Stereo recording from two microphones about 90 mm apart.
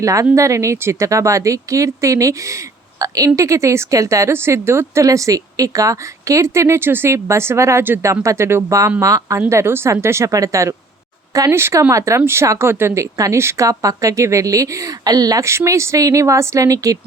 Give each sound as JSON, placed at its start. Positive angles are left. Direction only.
{"t": 0.0, "sound": "speech", "side_deg": -35}